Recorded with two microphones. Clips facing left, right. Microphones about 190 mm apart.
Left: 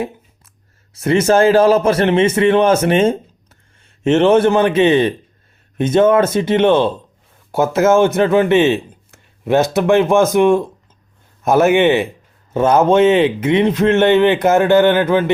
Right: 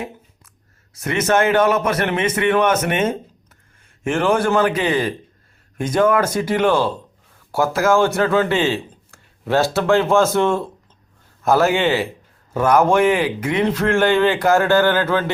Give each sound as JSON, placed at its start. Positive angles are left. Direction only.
{"t": 0.9, "sound": "speech", "side_deg": 30}